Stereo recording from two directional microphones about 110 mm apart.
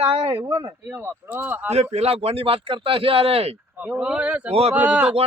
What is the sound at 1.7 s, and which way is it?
Speech, 75° right (ahead or behind).